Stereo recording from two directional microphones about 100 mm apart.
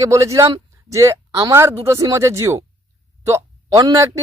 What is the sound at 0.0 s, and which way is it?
A man's voice, 35° right (ahead or behind).